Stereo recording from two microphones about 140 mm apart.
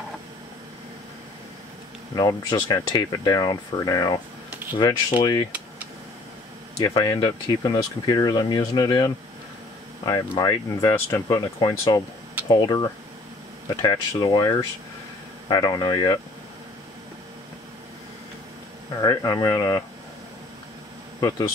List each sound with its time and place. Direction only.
2.1 s speech: 30° left (ahead or behind)
4.5 s a sound: 15° right (ahead or behind)
4.7 s speech: 30° left (ahead or behind)
6.8 s speech: 25° left (ahead or behind)
10.9 s speech: 15° left (ahead or behind)
18.9 s speech: 25° left (ahead or behind)